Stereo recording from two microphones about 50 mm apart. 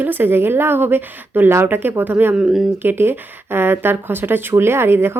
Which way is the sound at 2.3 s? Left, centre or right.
Centre.